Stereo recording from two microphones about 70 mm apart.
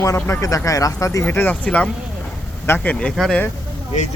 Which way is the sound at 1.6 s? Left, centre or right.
Centre.